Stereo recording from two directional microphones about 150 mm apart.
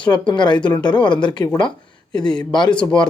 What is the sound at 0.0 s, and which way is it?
Speech, 30° left (ahead or behind).